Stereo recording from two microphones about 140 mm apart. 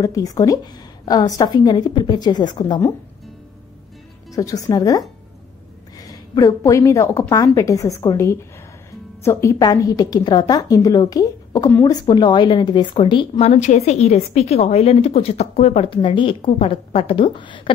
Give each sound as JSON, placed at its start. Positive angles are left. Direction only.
{"t": 0.0, "sound": "a woman's voice", "side_deg": 25}
{"t": 4.3, "sound": "a woman's voice", "side_deg": 25}
{"t": 13.5, "sound": "a woman's voice", "side_deg": 55}